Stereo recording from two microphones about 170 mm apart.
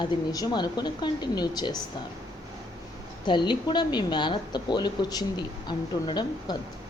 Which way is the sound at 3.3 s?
25° left (ahead or behind).